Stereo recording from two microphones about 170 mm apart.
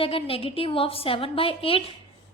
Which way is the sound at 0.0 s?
35° left (ahead or behind).